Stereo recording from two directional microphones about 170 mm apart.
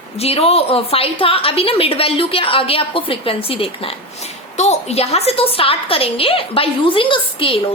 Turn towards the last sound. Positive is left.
turn(degrees=30)  # may be behind; listen again after turning